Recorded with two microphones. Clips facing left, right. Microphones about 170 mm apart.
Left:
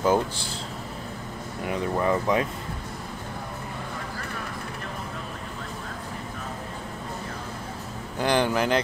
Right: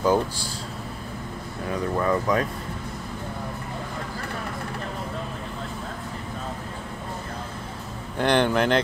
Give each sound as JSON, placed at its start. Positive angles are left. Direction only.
{"t": 0.0, "sound": "speech", "side_deg": 20}
{"t": 1.7, "sound": "speech", "side_deg": 20}
{"t": 8.2, "sound": "speech", "side_deg": 10}